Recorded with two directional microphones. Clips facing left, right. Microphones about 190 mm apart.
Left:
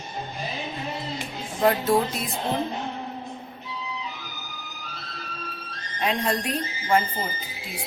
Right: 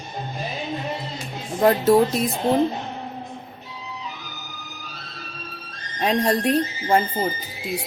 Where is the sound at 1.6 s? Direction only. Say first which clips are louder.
Right 5 dB; 40° right (ahead or behind).